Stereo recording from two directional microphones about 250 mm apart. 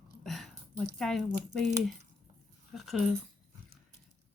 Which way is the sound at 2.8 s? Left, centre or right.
Centre.